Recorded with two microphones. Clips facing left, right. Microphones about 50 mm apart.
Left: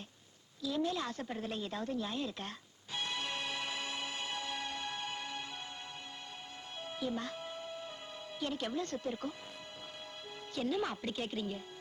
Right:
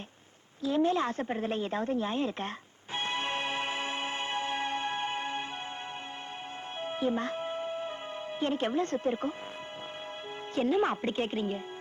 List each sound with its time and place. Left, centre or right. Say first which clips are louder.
0.6 s speech: right 8 dB; right
2.9 s music: right 6 dB; right
6.8 s music: right 8 dB; right
8.4 s speech: right 8 dB; right
10.5 s speech: right 8 dB; right